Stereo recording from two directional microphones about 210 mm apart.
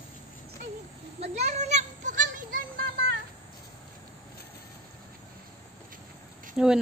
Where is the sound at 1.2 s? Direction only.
30° right (ahead or behind).